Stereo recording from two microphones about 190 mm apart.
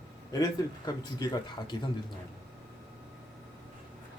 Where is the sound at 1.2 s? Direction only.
25° left (ahead or behind).